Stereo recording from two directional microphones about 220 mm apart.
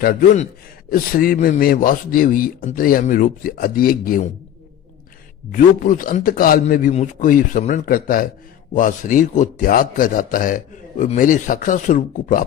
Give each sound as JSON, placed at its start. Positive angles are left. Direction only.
{"t": 0.0, "sound": "a man's voice", "side_deg": 35}
{"t": 5.5, "sound": "a man's voice", "side_deg": 35}